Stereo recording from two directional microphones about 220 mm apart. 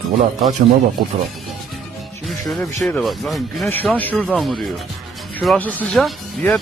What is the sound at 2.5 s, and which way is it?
Speech, 5° left (ahead or behind).